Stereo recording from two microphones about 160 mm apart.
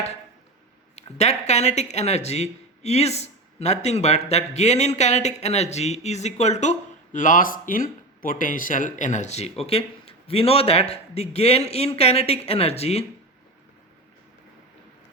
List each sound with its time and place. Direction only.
1.2 s speech: 45° left (ahead or behind)